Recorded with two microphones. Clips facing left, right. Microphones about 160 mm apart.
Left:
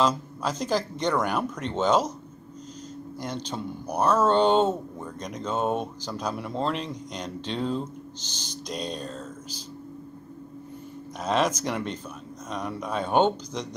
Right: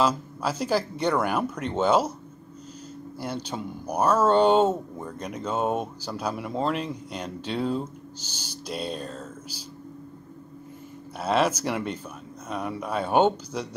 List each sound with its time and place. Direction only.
0.4 s speech: 10° right (ahead or behind)
3.2 s speech: 10° right (ahead or behind)
11.1 s speech: 10° right (ahead or behind)